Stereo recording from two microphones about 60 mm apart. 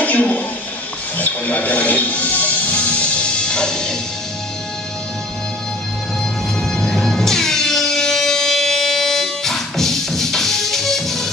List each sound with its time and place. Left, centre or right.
0.0 s a sound: left
1.1 s music: left; by 3.9 s centre
6.6 s music: centre